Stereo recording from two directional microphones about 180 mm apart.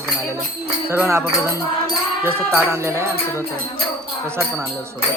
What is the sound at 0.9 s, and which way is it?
Music, 10° right (ahead or behind).